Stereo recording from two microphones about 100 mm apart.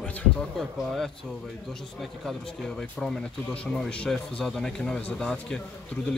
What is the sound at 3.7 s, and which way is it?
A man's voice, 5° left (ahead or behind).